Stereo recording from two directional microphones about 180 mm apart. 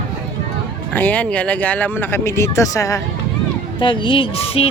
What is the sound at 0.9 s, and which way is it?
Speech, 10° left (ahead or behind).